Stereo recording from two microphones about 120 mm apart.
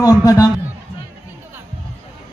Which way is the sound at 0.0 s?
30° left (ahead or behind).